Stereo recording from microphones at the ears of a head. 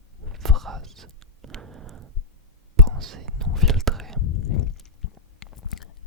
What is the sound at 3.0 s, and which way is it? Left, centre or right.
Whispering, right.